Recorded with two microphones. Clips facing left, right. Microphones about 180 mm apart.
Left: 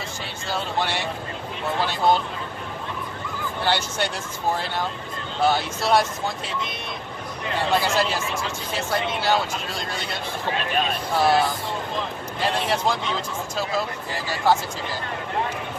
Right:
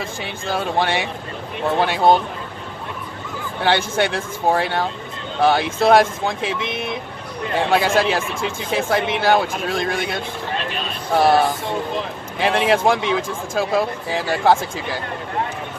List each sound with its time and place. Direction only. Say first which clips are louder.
0.5 s speech: right 6 dB; 55° right (ahead or behind)
3.6 s speech: right 6 dB; 60° right (ahead or behind)
7.7 s speech: right 5 dB; 60° right (ahead or behind)
11.1 s speech: right 5 dB; 50° right (ahead or behind)
12.4 s speech: right 7 dB; 70° right (ahead or behind)
12.9 s speech: right 7 dB; 55° right (ahead or behind)